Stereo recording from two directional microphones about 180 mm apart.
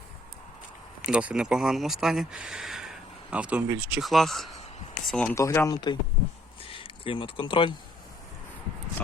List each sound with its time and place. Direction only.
1.0 s speech: 5° right (ahead or behind)
5.3 s speech: 15° left (ahead or behind)